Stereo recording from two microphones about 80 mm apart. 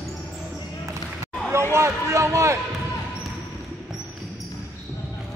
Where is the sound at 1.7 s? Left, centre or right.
Right.